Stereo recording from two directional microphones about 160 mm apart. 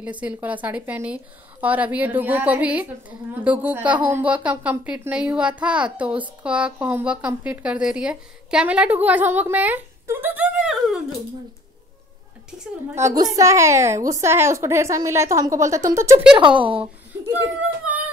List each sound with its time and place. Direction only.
0.0 s a woman's voice: 10° right (ahead or behind)
12.9 s a woman's voice: 20° right (ahead or behind)
16.3 s a woman's voice: 30° right (ahead or behind)
17.3 s a child's voice: 10° right (ahead or behind)